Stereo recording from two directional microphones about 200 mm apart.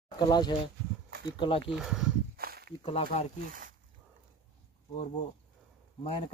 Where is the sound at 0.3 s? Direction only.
20° left (ahead or behind).